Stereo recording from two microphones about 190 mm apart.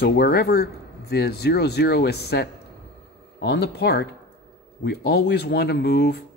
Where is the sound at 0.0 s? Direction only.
55° left (ahead or behind).